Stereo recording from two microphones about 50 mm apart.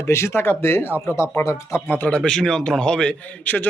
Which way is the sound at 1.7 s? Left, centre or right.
Left.